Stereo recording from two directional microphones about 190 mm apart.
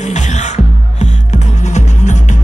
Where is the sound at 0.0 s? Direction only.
40° left (ahead or behind).